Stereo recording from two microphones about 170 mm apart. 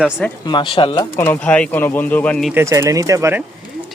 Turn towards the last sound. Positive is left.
turn(degrees=-15)  # may be behind; listen again after turning